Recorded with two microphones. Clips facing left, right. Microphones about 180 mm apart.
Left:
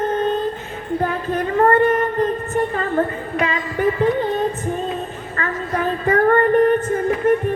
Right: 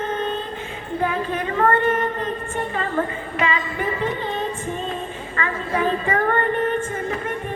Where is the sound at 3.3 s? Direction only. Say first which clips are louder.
Left 1 dB; 45° left (ahead or behind).